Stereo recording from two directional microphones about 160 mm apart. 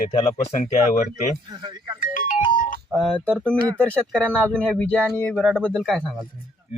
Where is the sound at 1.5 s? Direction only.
30° right (ahead or behind).